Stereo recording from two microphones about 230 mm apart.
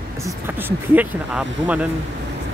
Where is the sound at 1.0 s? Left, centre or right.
Centre.